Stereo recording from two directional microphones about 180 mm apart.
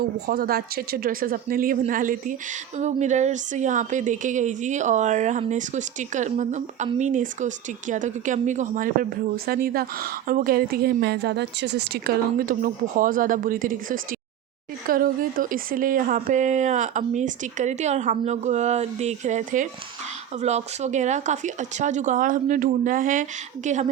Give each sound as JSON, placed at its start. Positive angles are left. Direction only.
{"t": 0.3, "sound": "a woman's voice", "side_deg": -60}